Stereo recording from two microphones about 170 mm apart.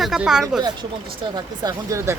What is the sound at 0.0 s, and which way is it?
Speech, 5° right (ahead or behind).